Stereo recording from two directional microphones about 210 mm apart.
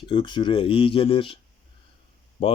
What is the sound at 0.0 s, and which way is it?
Speech, 25° left (ahead or behind).